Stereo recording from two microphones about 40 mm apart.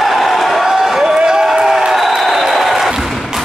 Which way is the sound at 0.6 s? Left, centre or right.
Centre.